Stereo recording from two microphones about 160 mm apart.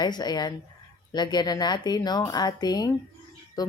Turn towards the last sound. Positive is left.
turn(degrees=25)  # may be behind; listen again after turning